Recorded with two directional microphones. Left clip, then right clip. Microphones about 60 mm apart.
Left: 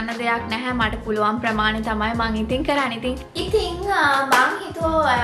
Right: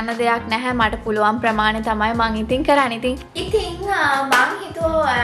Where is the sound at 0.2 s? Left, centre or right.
Right.